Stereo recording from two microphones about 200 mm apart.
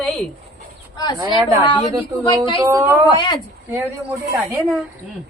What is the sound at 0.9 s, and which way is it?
Speech, 20° left (ahead or behind).